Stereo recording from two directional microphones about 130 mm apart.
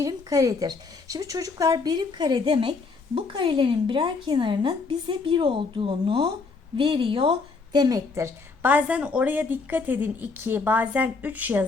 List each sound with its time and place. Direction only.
0.0 s a woman's voice: 25° right (ahead or behind); by 7.3 s 45° right (ahead or behind)
7.7 s a woman's voice: 30° right (ahead or behind); by 11.6 s 15° right (ahead or behind)